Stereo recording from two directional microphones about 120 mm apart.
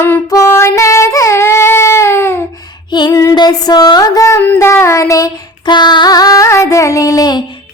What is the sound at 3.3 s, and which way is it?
Child singing, 35° left (ahead or behind).